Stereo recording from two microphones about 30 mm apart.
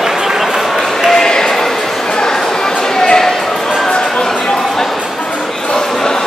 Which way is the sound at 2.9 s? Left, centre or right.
Left.